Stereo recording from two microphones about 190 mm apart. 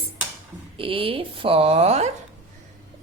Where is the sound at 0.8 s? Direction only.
30° right (ahead or behind).